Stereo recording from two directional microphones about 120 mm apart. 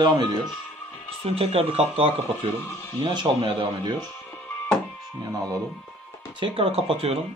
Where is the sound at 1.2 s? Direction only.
55° right (ahead or behind).